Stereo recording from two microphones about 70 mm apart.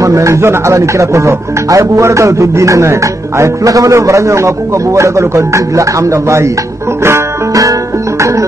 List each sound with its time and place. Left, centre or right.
0.0 s speech: right